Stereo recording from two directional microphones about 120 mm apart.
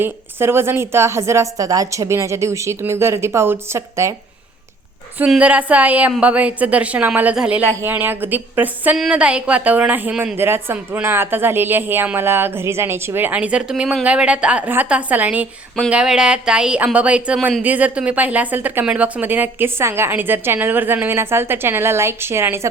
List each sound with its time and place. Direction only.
0.0 s a woman's voice: 20° right (ahead or behind)
5.2 s a woman's voice: 10° right (ahead or behind)